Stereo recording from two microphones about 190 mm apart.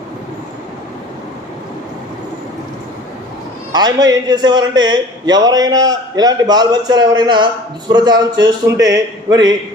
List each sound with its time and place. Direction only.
3.7 s a man's voice: 20° right (ahead or behind)